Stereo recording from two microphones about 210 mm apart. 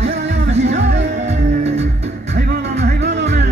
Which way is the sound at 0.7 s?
60° right (ahead or behind).